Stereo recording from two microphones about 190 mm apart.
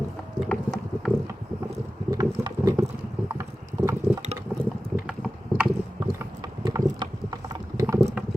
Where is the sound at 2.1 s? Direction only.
20° right (ahead or behind).